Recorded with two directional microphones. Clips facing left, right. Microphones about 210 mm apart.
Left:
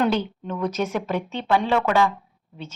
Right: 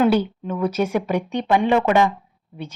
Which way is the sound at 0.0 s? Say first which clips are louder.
Right 5 dB; 10° right (ahead or behind).